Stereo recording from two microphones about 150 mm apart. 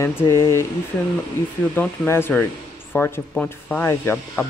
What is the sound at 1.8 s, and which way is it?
Speech, 15° left (ahead or behind).